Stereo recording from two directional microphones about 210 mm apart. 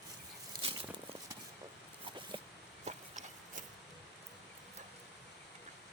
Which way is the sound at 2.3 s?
25° right (ahead or behind).